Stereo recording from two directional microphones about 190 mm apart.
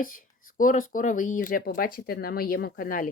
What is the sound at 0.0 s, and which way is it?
A woman's voice, 45° left (ahead or behind).